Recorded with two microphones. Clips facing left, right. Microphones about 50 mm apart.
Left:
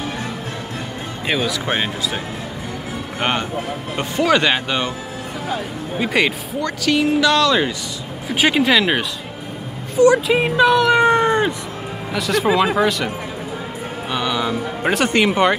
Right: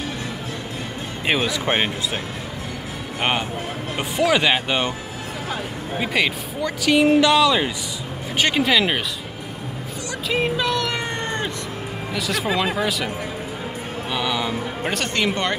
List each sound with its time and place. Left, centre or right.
1.2 s speech: centre
3.2 s speech: centre
5.9 s speech: centre
6.6 s speech: centre
8.4 s speech: centre
10.0 s speech: left
11.0 s cat: centre
12.1 s speech: centre
14.1 s speech: centre
14.8 s speech: centre